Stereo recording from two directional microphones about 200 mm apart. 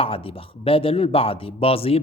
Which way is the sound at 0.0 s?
25° left (ahead or behind).